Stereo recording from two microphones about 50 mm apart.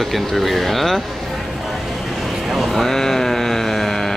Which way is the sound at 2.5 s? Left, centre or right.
Centre.